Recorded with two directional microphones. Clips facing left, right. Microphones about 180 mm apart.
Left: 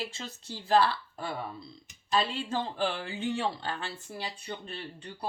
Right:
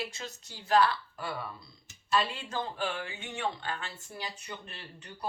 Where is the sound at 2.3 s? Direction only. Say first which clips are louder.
Left 4 dB; 30° left (ahead or behind).